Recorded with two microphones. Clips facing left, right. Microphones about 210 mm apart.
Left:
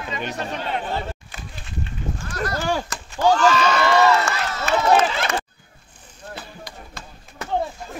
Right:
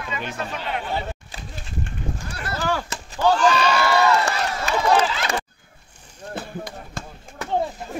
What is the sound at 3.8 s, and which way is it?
Run, 15° right (ahead or behind).